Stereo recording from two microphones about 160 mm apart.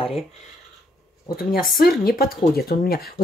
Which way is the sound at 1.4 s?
65° left (ahead or behind).